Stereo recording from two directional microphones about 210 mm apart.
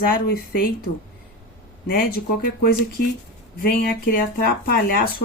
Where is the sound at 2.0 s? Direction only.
50° left (ahead or behind).